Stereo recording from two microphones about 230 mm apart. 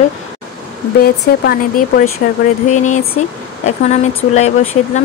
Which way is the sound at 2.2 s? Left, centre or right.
Left.